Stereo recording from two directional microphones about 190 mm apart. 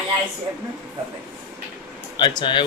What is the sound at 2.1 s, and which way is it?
Speech, 25° left (ahead or behind).